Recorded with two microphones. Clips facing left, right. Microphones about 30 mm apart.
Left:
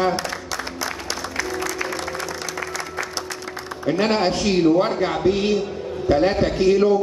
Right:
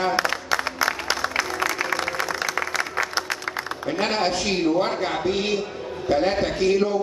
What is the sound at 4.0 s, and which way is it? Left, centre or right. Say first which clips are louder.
A man's voice: left 3 dB; centre.